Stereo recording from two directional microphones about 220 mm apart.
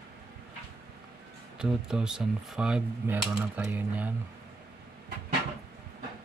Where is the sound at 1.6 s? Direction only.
5° right (ahead or behind).